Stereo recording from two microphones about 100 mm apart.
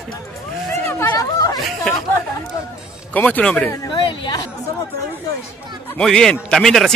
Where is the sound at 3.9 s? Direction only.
45° left (ahead or behind).